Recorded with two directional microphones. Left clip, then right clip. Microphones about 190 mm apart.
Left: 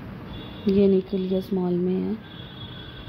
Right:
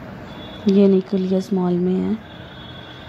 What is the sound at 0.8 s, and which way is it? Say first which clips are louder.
Speech: right 4 dB; 10° right (ahead or behind).